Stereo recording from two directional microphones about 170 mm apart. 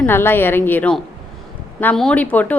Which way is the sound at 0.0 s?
15° left (ahead or behind).